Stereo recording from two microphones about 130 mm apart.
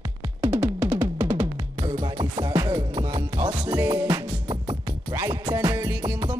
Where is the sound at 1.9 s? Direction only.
40° right (ahead or behind).